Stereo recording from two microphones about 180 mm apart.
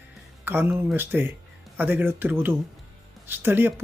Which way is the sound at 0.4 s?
10° right (ahead or behind).